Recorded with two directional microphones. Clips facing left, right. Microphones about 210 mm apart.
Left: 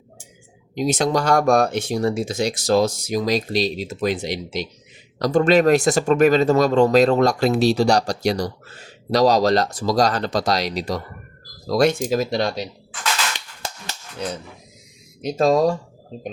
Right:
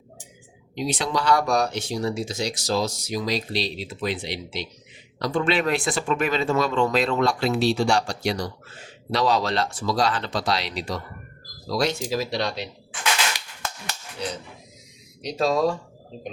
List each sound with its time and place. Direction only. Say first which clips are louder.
0.8 s speech: left 6 dB; 45° left (ahead or behind)
15.2 s speech: left 5 dB; 50° left (ahead or behind)